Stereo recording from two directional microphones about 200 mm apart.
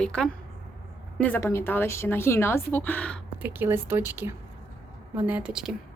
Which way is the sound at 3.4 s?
10° right (ahead or behind).